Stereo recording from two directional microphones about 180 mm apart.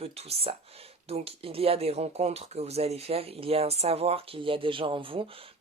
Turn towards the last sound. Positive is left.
turn(degrees=-30)  # may be behind; listen again after turning